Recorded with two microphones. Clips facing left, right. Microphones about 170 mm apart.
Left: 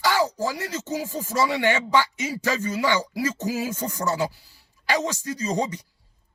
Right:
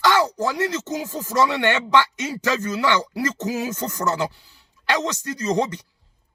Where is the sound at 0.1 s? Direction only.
70° right (ahead or behind).